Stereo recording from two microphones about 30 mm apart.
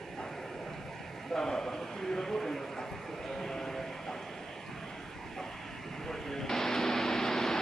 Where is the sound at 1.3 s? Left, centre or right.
Centre.